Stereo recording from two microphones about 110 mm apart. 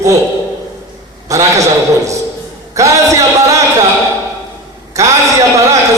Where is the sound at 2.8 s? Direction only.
30° right (ahead or behind).